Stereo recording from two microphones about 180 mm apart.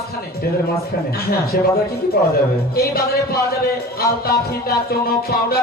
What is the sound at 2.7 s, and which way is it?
Music, 60° left (ahead or behind).